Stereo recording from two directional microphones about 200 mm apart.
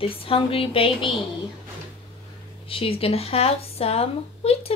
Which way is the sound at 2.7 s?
30° left (ahead or behind).